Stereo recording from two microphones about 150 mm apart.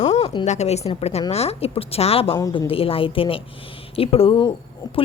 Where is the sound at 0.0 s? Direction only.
50° left (ahead or behind).